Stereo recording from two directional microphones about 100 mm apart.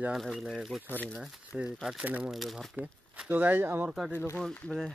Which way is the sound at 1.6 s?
5° right (ahead or behind).